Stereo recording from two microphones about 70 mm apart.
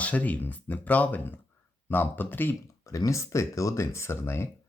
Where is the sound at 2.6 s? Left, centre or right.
Left.